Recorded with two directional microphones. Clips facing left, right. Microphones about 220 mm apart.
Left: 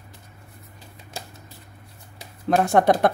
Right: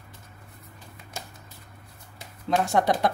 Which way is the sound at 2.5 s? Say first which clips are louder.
Left 5 dB; 55° left (ahead or behind).